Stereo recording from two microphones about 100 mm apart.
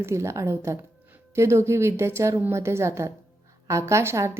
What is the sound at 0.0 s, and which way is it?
A woman's voice, 30° right (ahead or behind).